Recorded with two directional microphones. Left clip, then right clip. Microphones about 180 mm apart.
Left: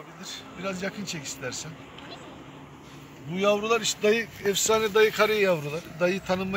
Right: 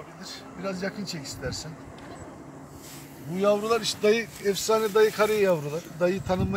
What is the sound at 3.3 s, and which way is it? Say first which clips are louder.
Speech: even; 10° right (ahead or behind).